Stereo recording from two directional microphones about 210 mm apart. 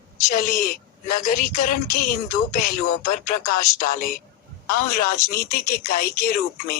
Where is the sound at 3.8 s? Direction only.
40° left (ahead or behind).